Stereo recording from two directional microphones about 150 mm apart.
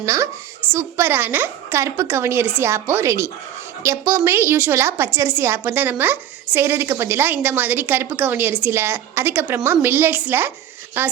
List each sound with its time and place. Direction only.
0.0 s a woman's voice: 20° right (ahead or behind)